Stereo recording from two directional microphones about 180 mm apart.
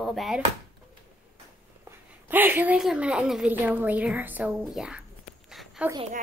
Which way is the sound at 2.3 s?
10° right (ahead or behind).